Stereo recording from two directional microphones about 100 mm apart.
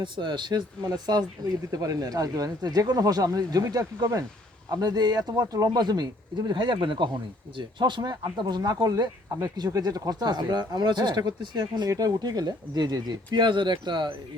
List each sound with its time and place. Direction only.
0.0 s speech: 50° right (ahead or behind)